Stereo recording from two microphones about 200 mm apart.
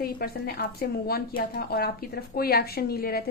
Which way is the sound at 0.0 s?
50° left (ahead or behind).